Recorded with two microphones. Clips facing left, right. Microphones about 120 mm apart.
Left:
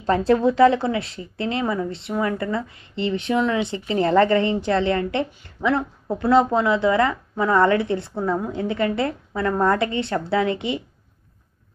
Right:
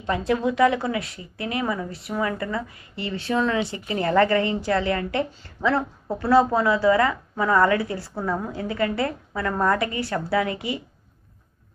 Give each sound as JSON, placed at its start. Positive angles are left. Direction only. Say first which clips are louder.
{"t": 0.0, "sound": "a woman's voice", "louder": "left 5 dB", "side_deg": 35}